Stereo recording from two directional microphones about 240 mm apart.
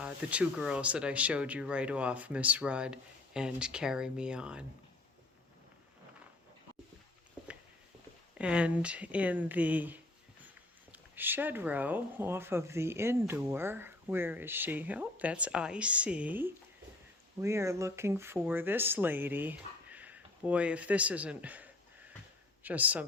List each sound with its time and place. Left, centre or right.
0.0 s speech: centre
8.4 s speech: centre